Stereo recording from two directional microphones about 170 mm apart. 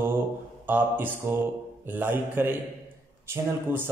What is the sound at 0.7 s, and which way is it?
A man's voice, 10° right (ahead or behind).